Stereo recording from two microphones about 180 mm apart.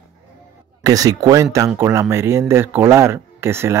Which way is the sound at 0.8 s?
20° right (ahead or behind).